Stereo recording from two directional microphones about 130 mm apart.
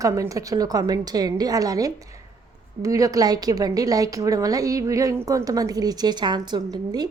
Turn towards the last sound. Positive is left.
turn(degrees=-30)  # may be behind; listen again after turning